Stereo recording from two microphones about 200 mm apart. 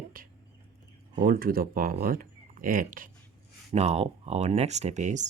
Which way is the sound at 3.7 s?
30° right (ahead or behind).